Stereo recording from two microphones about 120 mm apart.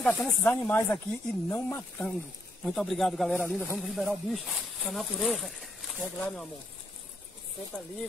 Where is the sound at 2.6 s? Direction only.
5° left (ahead or behind).